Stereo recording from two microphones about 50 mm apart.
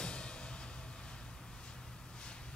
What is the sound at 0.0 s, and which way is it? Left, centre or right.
Music, centre.